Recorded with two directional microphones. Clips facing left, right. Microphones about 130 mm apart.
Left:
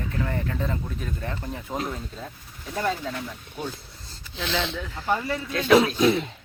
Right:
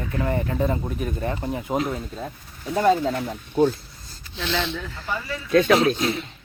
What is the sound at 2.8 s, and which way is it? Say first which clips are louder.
Speech: right 8 dB; 30° right (ahead or behind).